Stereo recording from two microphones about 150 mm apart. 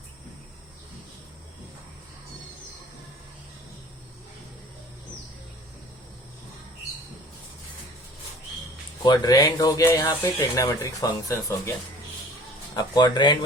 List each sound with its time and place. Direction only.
9.0 s speech: 25° left (ahead or behind)
12.7 s speech: 30° left (ahead or behind)